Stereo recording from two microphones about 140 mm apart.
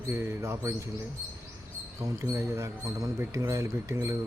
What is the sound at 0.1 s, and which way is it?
Speech, 20° right (ahead or behind).